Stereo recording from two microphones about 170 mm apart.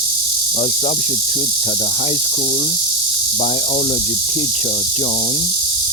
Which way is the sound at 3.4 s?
35° left (ahead or behind).